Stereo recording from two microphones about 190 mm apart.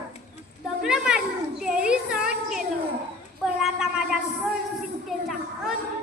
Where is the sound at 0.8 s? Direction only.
5° right (ahead or behind).